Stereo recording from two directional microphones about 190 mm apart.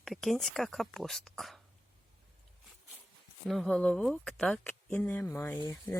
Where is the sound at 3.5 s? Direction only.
Centre (ahead or behind).